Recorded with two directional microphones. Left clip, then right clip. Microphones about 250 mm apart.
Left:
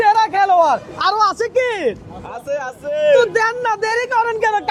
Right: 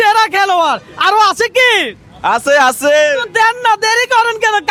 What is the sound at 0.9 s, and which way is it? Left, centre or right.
Speech, right.